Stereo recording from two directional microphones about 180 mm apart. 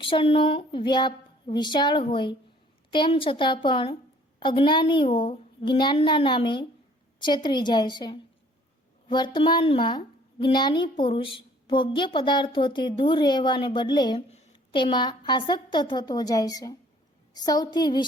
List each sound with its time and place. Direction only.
0.0 s a woman's voice: 30° left (ahead or behind)